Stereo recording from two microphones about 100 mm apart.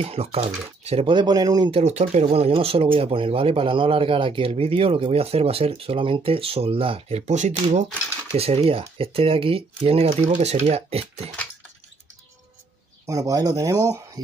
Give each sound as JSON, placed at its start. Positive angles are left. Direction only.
{"t": 0.0, "sound": "speech", "side_deg": -80}
{"t": 1.1, "sound": "speech", "side_deg": -45}
{"t": 1.7, "sound": "speech", "side_deg": -85}
{"t": 8.4, "sound": "speech", "side_deg": -85}
{"t": 13.0, "sound": "speech", "side_deg": -35}